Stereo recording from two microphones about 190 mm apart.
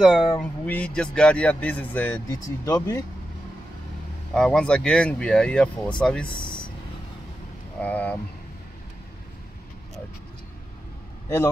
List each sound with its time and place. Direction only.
0.0 s speech: centre (ahead or behind)
2.6 s speech: 20° left (ahead or behind)
4.3 s speech: 5° left (ahead or behind)
6.3 s speech: 25° left (ahead or behind)
7.8 s speech: 10° left (ahead or behind)